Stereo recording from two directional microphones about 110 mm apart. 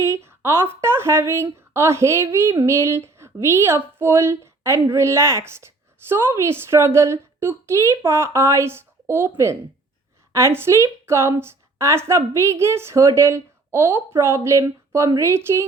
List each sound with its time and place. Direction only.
0.0 s a woman's voice: 25° right (ahead or behind)
10.3 s a woman's voice: 25° right (ahead or behind)